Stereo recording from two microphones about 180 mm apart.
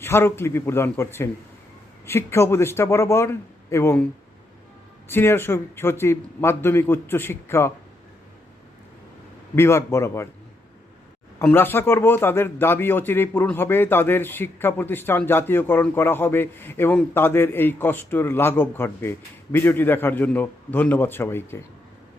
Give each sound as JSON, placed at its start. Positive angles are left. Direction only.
{"t": 0.0, "sound": "a man's voice", "side_deg": 15}
{"t": 9.6, "sound": "a man's voice", "side_deg": 15}
{"t": 11.3, "sound": "a man's voice", "side_deg": 10}